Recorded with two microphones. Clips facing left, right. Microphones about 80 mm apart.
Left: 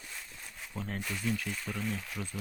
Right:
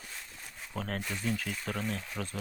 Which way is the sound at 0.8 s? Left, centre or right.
Right.